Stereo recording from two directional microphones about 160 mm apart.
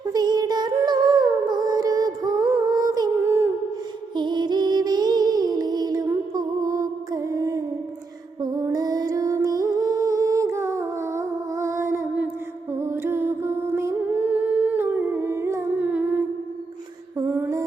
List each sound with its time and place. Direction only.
0.1 s music: 25° right (ahead or behind)
4.1 s music: 25° right (ahead or behind); by 12.3 s 10° right (ahead or behind)
12.7 s humming: 15° right (ahead or behind)
17.2 s a sound: 10° right (ahead or behind)